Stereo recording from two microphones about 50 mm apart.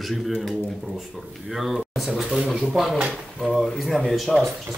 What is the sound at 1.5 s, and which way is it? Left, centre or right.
Speech, centre.